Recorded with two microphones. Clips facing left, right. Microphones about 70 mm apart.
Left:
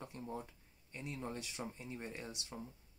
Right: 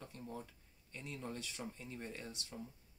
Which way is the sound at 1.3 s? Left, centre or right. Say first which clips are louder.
Left 1 dB; centre.